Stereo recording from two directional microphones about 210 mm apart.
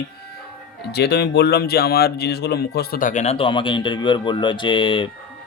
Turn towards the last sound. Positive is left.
turn(degrees=25)  # may be behind; listen again after turning